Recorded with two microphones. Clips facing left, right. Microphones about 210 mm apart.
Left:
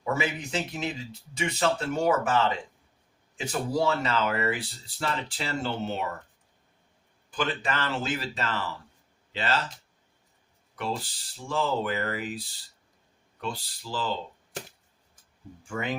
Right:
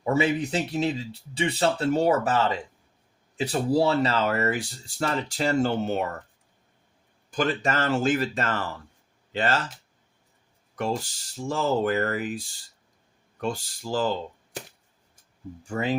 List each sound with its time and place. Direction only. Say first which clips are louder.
0.0 s speech: right 6 dB; 30° right (ahead or behind); by 6.1 s 50° right (ahead or behind)
7.3 s speech: right 4 dB; 45° right (ahead or behind)
10.8 s speech: right 4 dB; 45° right (ahead or behind)
15.6 s speech: right 5 dB; 35° right (ahead or behind)